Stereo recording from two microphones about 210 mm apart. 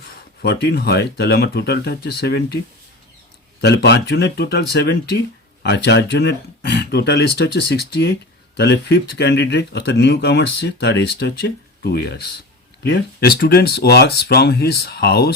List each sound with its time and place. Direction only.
0.4 s speech: 50° left (ahead or behind)
3.6 s speech: 55° left (ahead or behind)